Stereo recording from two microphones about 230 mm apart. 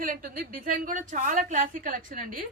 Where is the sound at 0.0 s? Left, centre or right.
Right.